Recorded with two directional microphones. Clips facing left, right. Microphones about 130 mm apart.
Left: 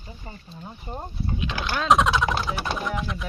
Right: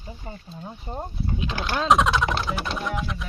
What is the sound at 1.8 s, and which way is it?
Speech, centre (ahead or behind).